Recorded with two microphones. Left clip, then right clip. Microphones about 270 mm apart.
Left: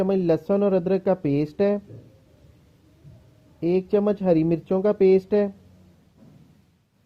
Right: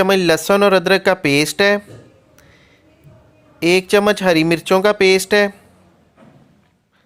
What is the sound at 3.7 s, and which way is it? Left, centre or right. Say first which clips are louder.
Speech: right 8 dB; centre.